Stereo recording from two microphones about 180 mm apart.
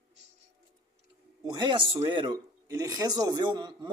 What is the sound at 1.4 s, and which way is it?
Speech, 25° right (ahead or behind).